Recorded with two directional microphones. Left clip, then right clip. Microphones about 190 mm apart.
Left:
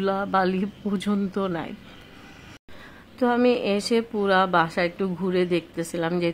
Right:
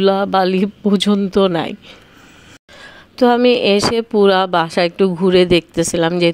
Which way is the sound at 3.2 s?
40° right (ahead or behind).